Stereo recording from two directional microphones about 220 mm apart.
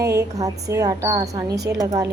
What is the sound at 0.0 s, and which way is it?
Speech, 15° right (ahead or behind).